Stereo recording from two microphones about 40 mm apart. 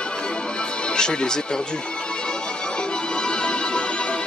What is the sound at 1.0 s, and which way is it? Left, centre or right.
Speech, centre.